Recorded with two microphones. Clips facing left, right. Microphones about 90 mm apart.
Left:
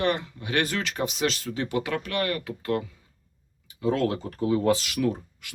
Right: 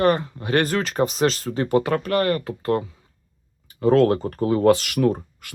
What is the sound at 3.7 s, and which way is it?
Speech, 50° right (ahead or behind).